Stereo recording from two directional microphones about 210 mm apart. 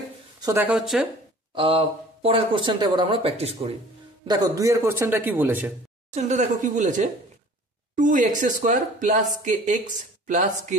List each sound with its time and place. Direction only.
0.4 s speech: 10° right (ahead or behind)
1.5 s speech: 25° right (ahead or behind)
4.3 s a man's voice: 15° right (ahead or behind)
6.1 s speech: 35° right (ahead or behind)